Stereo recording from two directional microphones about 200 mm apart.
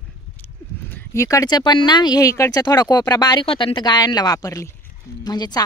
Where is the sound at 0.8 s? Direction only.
10° left (ahead or behind).